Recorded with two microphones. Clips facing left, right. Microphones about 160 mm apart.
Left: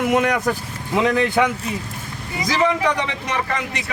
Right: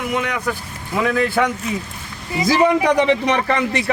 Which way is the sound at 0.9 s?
20° left (ahead or behind).